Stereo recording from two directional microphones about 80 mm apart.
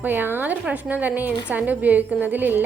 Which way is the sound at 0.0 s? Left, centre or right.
Right.